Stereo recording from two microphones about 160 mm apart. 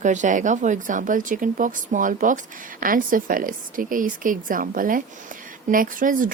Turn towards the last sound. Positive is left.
turn(degrees=-55)  # may be behind; listen again after turning